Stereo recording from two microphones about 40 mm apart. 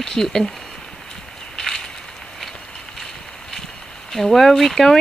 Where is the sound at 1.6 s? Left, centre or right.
Centre.